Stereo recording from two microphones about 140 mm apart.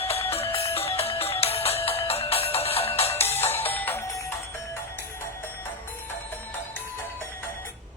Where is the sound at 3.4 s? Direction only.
15° left (ahead or behind).